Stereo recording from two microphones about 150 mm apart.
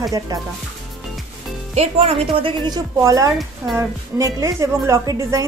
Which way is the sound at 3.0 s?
20° right (ahead or behind).